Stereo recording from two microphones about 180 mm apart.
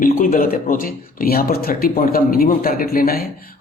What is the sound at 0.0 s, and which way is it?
Speech, 50° left (ahead or behind).